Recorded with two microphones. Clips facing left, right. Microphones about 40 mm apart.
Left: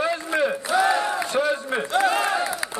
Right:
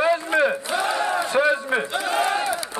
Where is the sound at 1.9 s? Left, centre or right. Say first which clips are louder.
Left 7 dB; left.